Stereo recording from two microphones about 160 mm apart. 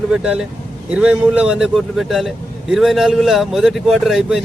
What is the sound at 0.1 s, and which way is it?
A man's voice, 5° right (ahead or behind).